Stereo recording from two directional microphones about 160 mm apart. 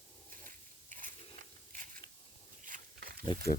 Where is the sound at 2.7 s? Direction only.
65° right (ahead or behind).